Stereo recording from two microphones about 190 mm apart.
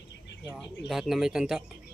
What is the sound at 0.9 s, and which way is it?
Speech, centre (ahead or behind).